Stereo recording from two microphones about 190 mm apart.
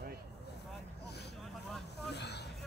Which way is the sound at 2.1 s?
60° left (ahead or behind).